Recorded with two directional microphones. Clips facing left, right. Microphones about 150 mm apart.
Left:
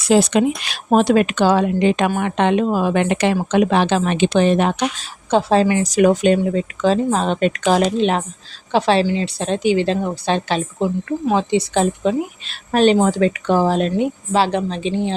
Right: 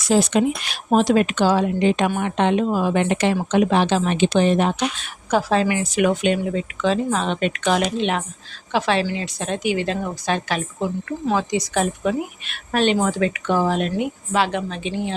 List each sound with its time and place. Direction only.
0.1 s speech: 85° left
0.9 s a woman's voice: 65° left (ahead or behind)
4.9 s a woman's voice: 30° left (ahead or behind)